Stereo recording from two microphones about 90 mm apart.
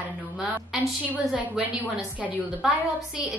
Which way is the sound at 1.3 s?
15° right (ahead or behind).